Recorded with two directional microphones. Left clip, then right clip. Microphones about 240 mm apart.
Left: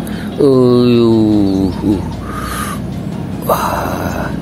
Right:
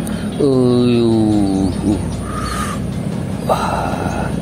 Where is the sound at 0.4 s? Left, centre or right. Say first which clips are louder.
Left 5 dB; left.